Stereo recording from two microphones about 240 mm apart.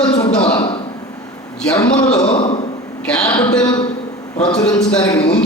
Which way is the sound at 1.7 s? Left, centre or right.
Centre.